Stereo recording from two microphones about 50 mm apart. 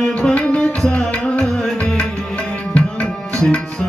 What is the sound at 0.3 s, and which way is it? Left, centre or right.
Tabla, left.